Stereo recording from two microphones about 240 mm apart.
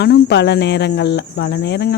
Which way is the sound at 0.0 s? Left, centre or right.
Left.